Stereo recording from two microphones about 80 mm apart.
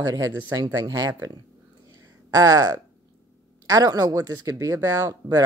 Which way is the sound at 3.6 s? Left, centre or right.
Right.